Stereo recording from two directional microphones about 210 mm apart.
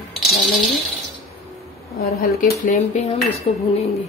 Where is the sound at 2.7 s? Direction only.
30° left (ahead or behind).